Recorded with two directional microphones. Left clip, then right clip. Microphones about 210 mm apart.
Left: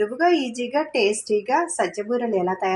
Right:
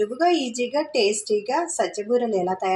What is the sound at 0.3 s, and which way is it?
Speech, 25° left (ahead or behind).